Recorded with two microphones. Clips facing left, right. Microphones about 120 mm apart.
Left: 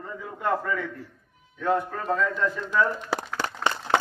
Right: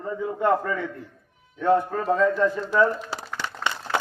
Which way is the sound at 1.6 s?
30° right (ahead or behind).